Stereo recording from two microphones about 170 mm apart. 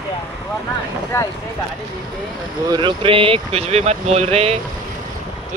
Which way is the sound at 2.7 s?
30° right (ahead or behind).